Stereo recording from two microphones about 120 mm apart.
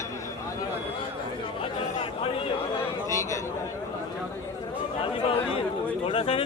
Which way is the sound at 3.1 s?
25° left (ahead or behind).